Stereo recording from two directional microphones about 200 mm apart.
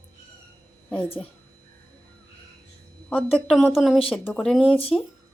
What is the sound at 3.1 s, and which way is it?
Speech, 5° left (ahead or behind).